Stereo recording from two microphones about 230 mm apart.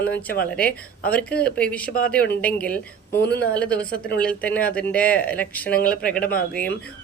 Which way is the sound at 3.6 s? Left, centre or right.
Centre.